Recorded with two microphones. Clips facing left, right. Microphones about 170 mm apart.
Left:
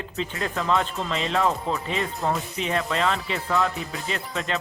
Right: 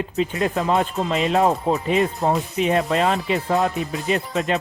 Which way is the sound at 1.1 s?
15° right (ahead or behind).